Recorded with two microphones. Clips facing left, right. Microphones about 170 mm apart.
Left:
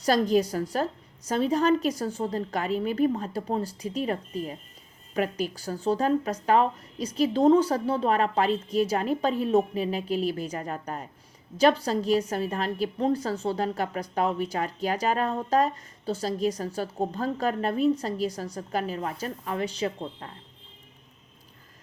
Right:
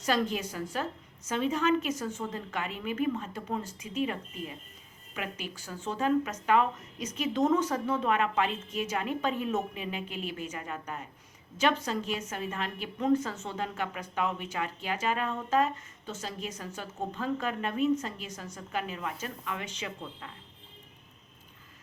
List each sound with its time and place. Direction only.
0.0 s a woman's voice: 35° left (ahead or behind)